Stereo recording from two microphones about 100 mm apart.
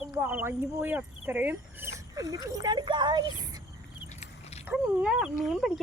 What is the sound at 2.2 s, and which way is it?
Speech, 35° right (ahead or behind).